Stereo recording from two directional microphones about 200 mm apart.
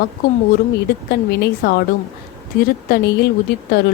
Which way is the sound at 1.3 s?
55° left (ahead or behind).